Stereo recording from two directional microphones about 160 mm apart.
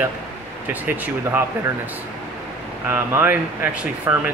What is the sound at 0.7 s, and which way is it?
Speech, 10° right (ahead or behind).